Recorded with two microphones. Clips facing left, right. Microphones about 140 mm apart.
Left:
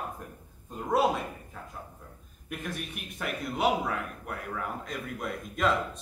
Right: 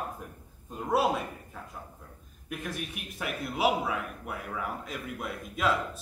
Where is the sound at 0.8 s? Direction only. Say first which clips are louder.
Left 1 dB; centre (ahead or behind).